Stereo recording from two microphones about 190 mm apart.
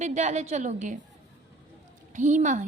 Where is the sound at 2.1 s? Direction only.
40° right (ahead or behind).